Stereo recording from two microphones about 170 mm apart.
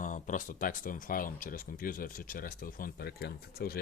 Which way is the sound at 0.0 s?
50° left (ahead or behind).